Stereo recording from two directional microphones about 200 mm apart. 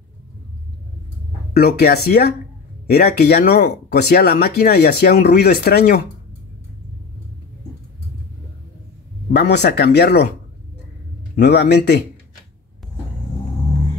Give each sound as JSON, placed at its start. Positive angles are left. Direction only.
{"t": 1.5, "sound": "speech", "side_deg": 55}
{"t": 9.3, "sound": "speech", "side_deg": 55}
{"t": 11.3, "sound": "speech", "side_deg": 55}